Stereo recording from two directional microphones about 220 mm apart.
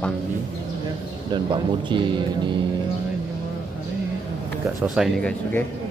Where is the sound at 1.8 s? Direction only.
20° right (ahead or behind).